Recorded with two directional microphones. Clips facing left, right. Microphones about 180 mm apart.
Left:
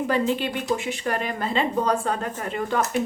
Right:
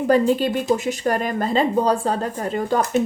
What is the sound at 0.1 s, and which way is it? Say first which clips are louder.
Speech: right 9 dB; 40° right (ahead or behind).